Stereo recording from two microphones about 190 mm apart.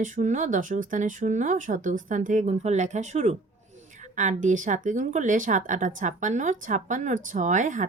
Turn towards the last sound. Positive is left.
turn(degrees=-40)  # may be behind; listen again after turning